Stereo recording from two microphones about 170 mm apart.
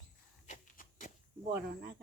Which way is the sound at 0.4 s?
45° left (ahead or behind).